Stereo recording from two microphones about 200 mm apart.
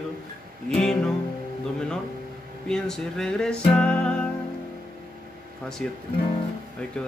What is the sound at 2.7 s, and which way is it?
Music, 5° left (ahead or behind).